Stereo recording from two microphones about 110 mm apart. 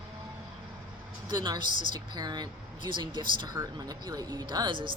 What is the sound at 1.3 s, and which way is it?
Speech, 40° right (ahead or behind).